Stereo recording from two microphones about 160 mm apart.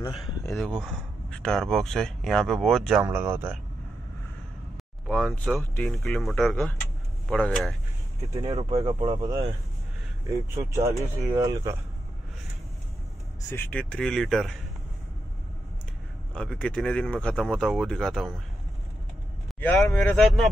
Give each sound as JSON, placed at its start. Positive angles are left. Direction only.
{"t": 0.6, "sound": "speech", "side_deg": 0}
{"t": 3.0, "sound": "speech", "side_deg": -15}
{"t": 5.0, "sound": "speech", "side_deg": 0}
{"t": 8.5, "sound": "speech", "side_deg": -35}
{"t": 10.7, "sound": "speech", "side_deg": -20}
{"t": 13.5, "sound": "speech", "side_deg": 10}
{"t": 16.3, "sound": "speech", "side_deg": 5}
{"t": 19.6, "sound": "speech", "side_deg": 10}